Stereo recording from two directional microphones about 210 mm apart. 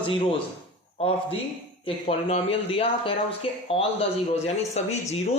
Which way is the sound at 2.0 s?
30° left (ahead or behind).